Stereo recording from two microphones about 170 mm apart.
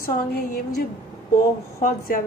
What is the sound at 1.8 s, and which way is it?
Speech, 55° left (ahead or behind).